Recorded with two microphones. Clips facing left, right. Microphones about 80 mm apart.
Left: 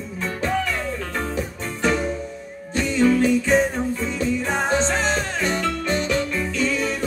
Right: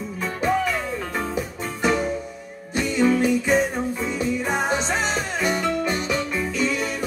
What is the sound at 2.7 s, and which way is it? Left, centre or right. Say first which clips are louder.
Music: left 1 dB; centre.